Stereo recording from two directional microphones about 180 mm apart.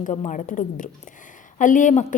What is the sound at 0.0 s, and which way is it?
A woman's voice, 40° left (ahead or behind).